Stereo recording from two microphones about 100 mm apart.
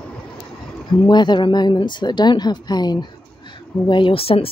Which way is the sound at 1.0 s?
50° left (ahead or behind).